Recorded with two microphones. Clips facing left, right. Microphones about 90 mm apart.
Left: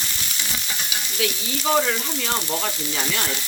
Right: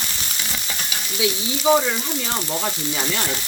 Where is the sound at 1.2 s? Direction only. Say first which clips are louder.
Right 4 dB; 10° right (ahead or behind).